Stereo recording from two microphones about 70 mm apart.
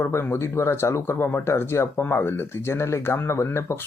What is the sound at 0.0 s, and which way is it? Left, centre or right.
Speech, left.